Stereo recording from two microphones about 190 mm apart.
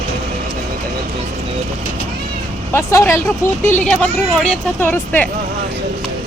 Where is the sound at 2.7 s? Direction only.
15° left (ahead or behind).